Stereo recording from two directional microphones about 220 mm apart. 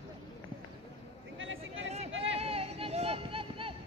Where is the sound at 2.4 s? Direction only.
25° right (ahead or behind).